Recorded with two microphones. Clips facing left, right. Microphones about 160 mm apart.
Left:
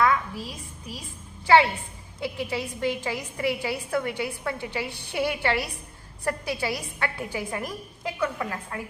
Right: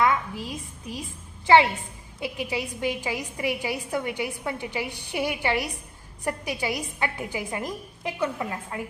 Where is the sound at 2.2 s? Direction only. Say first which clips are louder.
Even; 15° right (ahead or behind).